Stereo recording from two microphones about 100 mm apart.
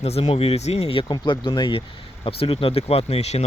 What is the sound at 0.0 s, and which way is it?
Speech, 90° left.